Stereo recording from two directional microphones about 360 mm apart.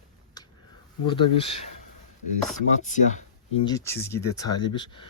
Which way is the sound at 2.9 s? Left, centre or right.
Centre.